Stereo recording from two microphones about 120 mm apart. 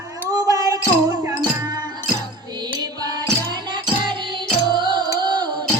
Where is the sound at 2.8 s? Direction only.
30° right (ahead or behind).